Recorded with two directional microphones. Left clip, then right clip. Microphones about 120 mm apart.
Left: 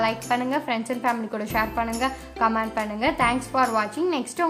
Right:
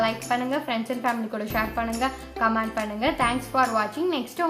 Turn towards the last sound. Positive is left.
turn(degrees=25)  # may be behind; listen again after turning